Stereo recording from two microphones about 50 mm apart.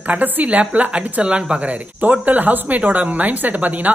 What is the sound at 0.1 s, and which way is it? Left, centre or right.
Speech, right.